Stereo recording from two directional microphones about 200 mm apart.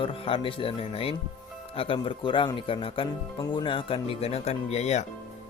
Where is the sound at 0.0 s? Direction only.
25° left (ahead or behind).